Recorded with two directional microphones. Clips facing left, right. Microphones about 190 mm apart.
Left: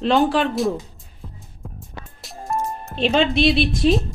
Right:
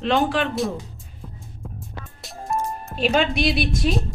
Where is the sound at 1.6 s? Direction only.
Centre (ahead or behind).